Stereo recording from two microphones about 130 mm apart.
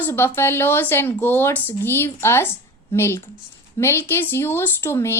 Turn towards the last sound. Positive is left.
turn(degrees=20)  # may be behind; listen again after turning